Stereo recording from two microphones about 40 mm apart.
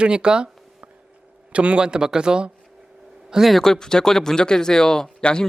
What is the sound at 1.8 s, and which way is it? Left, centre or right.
Speech, centre.